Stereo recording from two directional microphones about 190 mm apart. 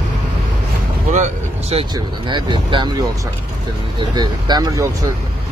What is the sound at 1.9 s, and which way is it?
Speech, 25° right (ahead or behind).